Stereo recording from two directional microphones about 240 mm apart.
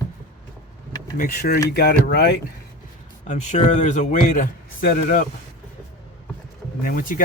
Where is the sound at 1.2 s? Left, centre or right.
Left.